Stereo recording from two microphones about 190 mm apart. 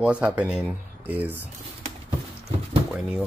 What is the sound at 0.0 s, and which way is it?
Speech, 5° right (ahead or behind).